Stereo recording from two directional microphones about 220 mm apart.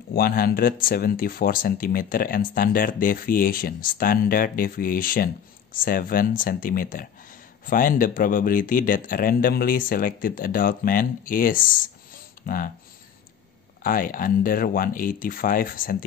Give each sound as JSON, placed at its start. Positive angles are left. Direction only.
{"t": 0.1, "sound": "speech", "side_deg": 45}
{"t": 13.8, "sound": "speech", "side_deg": 40}